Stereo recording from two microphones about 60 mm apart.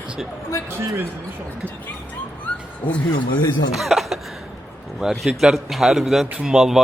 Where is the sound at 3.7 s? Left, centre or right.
Centre.